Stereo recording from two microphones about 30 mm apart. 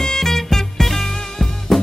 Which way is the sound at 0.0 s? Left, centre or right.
Centre.